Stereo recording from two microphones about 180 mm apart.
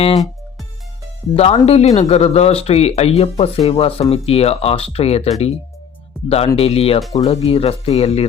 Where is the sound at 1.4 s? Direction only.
35° left (ahead or behind).